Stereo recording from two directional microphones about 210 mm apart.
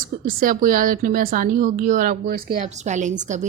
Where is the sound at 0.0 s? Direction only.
40° right (ahead or behind).